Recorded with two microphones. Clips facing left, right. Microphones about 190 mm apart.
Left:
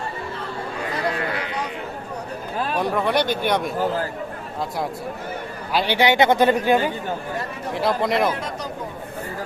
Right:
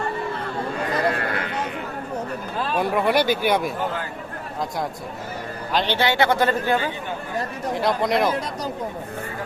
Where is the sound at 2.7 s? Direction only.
5° right (ahead or behind).